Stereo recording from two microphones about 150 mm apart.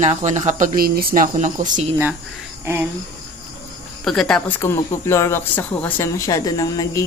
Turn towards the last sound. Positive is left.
turn(degrees=25)  # may be behind; listen again after turning